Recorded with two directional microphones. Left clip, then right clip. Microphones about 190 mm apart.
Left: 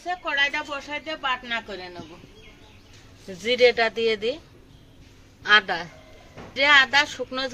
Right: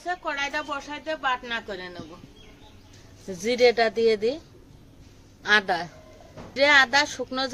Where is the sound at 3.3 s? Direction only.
50° right (ahead or behind).